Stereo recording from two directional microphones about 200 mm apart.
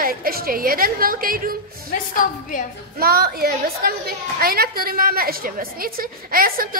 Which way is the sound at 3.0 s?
50° right (ahead or behind).